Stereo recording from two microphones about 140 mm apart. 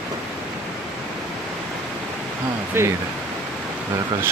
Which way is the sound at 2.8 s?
15° right (ahead or behind).